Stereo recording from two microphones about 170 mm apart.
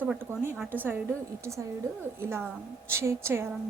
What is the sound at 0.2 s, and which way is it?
A woman's voice, 10° right (ahead or behind).